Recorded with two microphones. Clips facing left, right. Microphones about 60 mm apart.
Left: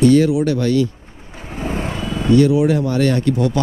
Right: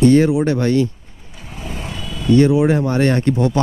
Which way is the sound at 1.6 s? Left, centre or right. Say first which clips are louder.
Left 6 dB; left.